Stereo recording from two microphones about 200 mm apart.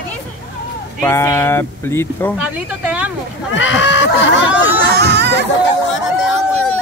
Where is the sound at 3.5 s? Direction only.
70° left (ahead or behind).